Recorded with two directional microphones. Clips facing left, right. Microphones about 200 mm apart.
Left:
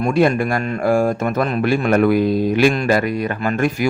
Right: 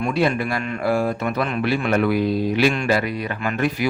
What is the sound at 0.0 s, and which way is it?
A man's voice, 45° left (ahead or behind).